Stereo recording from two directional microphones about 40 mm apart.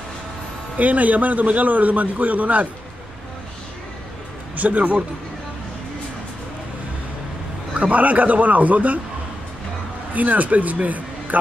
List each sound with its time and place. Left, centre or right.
0.7 s a man's voice: right
4.6 s a man's voice: right
7.7 s a man's voice: right
10.1 s speech: right